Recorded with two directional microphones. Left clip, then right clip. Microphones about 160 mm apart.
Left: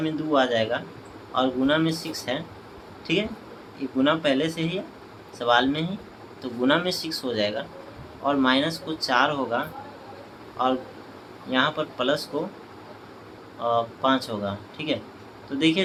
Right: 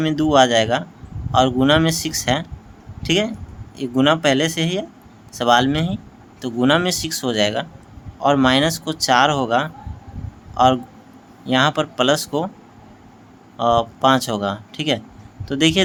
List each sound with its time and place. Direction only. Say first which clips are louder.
0.0 s speech: right 8 dB; 75° right (ahead or behind)
3.9 s speech: right 6 dB; 70° right (ahead or behind)
11.4 s speech: right 6 dB; 75° right (ahead or behind)
13.6 s speech: right 7 dB; 70° right (ahead or behind)